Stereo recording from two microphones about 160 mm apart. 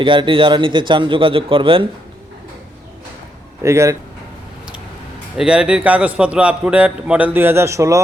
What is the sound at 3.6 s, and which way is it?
Speech, 20° right (ahead or behind).